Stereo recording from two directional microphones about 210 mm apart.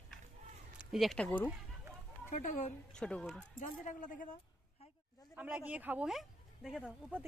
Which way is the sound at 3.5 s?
40° left (ahead or behind).